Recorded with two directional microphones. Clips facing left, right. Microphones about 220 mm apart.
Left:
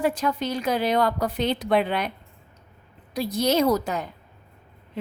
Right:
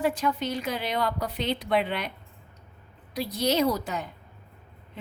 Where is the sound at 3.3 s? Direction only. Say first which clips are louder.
Left 3 dB; 45° left (ahead or behind).